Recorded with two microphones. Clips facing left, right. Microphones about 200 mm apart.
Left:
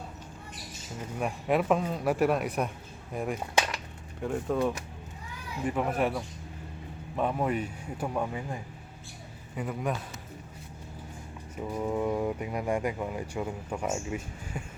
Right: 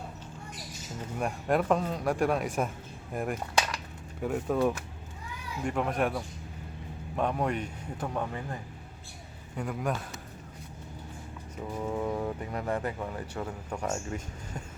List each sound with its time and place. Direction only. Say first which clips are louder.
1.2 s speech: even; 5° left (ahead or behind)
9.6 s speech: even; centre (ahead or behind)
11.5 s speech: left 3 dB; 10° left (ahead or behind)